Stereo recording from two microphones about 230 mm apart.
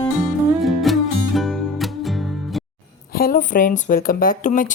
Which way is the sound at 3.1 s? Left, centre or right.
Left.